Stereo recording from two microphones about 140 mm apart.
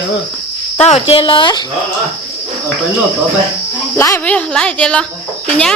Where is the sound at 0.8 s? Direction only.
45° left (ahead or behind).